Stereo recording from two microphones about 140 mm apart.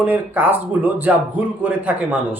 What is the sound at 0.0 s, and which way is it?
Speech, 10° right (ahead or behind).